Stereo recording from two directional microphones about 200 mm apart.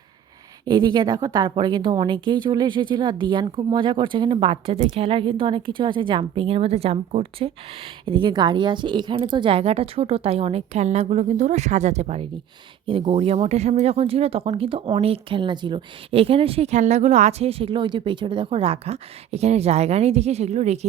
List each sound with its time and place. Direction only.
0.6 s speech: 20° right (ahead or behind)